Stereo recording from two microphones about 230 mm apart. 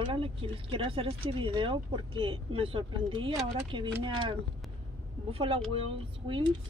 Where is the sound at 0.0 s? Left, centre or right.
Right.